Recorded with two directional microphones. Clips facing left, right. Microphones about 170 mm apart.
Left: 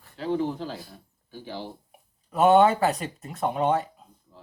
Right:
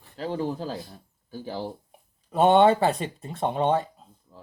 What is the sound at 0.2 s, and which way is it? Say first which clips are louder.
Speech: left 2 dB; 40° right (ahead or behind).